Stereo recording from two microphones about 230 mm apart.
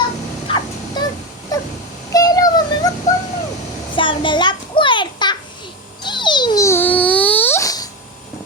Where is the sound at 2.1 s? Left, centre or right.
Centre.